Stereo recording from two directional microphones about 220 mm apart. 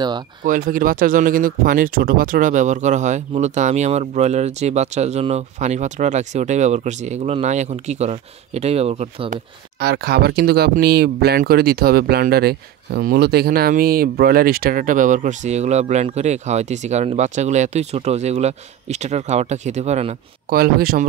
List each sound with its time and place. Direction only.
0.5 s speech: 40° right (ahead or behind)
9.8 s speech: 45° right (ahead or behind); by 20.2 s 30° right (ahead or behind)
20.4 s speech: 40° right (ahead or behind)